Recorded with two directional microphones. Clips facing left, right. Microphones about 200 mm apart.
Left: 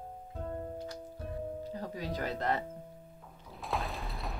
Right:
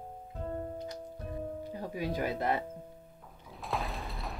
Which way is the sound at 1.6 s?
15° right (ahead or behind).